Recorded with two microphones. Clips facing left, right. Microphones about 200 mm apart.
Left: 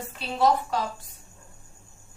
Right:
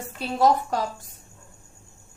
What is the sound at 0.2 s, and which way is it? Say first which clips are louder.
Speech: right 2 dB; 45° right (ahead or behind).